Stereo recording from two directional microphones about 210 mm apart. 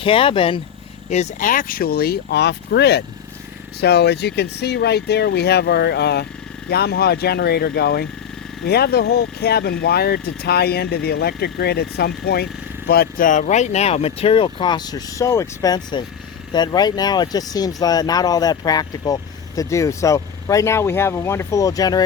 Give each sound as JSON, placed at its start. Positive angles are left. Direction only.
{"t": 0.0, "sound": "speech", "side_deg": 25}
{"t": 1.1, "sound": "speech", "side_deg": 35}